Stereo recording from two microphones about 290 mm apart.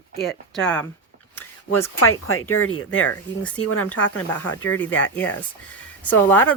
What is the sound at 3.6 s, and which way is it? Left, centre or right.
Speech, left.